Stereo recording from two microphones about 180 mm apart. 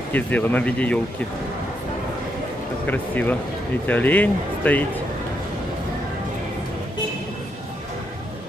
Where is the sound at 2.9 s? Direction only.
10° left (ahead or behind).